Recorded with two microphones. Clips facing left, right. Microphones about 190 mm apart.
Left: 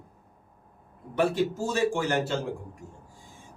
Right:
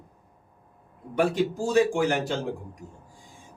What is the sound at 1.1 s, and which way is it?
Speech, 15° right (ahead or behind).